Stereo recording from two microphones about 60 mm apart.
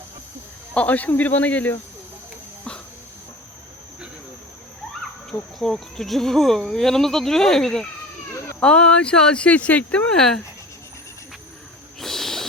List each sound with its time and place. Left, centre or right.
0.7 s speech: left
5.5 s speech: centre
8.6 s speech: centre
10.2 s speech: centre
11.9 s a sound: centre